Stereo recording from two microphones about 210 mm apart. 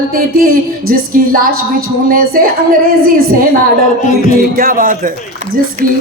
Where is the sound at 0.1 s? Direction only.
45° right (ahead or behind).